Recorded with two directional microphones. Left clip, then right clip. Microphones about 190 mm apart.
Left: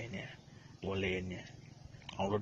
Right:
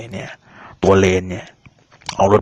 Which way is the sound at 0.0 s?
35° right (ahead or behind).